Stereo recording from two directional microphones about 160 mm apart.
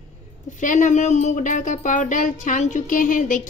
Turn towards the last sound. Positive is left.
turn(degrees=55)  # may be behind; listen again after turning